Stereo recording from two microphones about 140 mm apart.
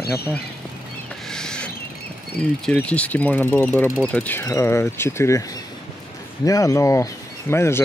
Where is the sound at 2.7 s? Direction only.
10° left (ahead or behind).